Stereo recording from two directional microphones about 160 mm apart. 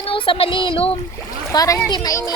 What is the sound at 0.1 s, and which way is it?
Speech, 35° left (ahead or behind).